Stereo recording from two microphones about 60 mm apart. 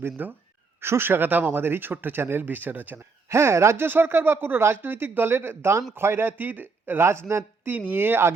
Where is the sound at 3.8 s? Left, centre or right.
Right.